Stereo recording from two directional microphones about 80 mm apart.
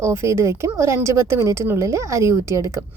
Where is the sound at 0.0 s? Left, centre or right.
Right.